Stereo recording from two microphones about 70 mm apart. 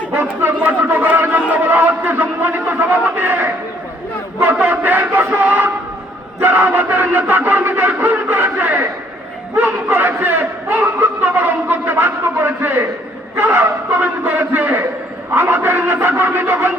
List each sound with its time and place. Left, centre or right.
0.1 s speech: right
4.7 s speech: right
15.4 s a sound: right